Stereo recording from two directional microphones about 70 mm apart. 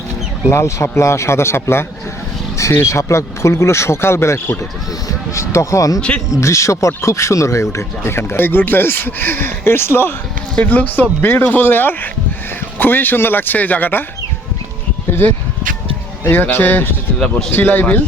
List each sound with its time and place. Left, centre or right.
0.5 s speech: left
6.0 s speech: centre
6.4 s speech: left
10.5 s speech: centre
16.2 s speech: left